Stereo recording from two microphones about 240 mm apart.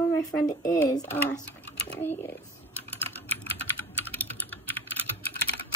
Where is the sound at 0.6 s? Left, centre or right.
Left.